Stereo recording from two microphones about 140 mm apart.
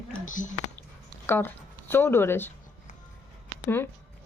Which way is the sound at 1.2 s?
15° left (ahead or behind).